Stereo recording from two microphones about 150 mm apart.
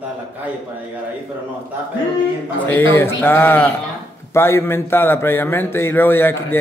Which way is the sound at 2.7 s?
15° left (ahead or behind).